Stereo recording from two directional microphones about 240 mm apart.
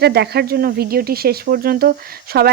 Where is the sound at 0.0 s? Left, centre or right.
Right.